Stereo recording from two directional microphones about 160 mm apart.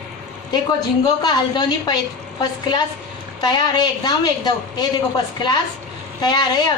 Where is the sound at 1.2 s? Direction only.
25° left (ahead or behind).